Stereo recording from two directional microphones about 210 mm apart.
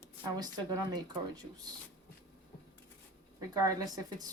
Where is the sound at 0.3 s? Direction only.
20° right (ahead or behind).